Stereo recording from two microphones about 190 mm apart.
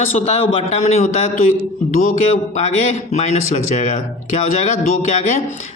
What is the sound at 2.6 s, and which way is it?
A man's voice, 40° left (ahead or behind).